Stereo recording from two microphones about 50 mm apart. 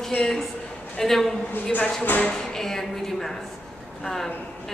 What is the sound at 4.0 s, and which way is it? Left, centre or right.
Speech, centre.